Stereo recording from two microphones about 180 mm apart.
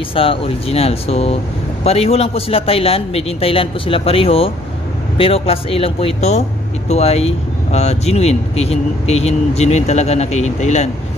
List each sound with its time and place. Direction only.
0.1 s speech: 30° left (ahead or behind)